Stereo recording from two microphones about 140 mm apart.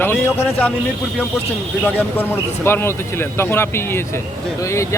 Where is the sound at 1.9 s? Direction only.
15° left (ahead or behind).